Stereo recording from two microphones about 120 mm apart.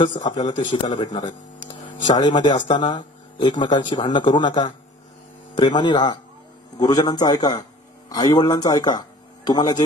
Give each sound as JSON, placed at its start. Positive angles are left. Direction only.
{"t": 0.0, "sound": "speech", "side_deg": 40}
{"t": 5.8, "sound": "speech", "side_deg": 40}